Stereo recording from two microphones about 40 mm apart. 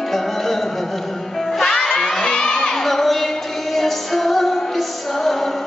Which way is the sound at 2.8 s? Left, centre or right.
Centre.